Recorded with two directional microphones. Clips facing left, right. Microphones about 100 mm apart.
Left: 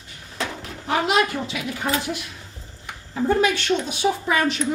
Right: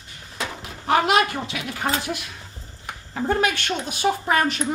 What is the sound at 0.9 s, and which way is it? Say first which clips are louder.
Speech: right 2 dB; 60° right (ahead or behind).